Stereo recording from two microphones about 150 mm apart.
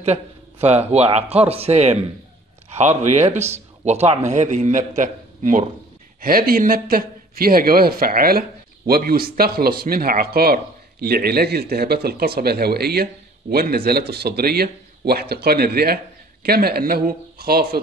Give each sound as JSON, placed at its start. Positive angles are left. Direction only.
{"t": 0.0, "sound": "a man's voice", "side_deg": -45}
{"t": 6.2, "sound": "speech", "side_deg": -75}